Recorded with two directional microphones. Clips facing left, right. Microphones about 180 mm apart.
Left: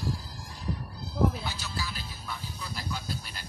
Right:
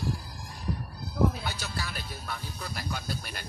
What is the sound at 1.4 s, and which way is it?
Vehicle, 60° right (ahead or behind).